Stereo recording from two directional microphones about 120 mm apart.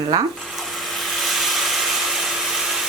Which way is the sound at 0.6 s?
Centre (ahead or behind).